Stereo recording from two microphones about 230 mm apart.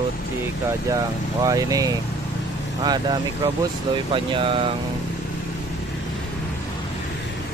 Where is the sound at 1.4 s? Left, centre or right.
Centre.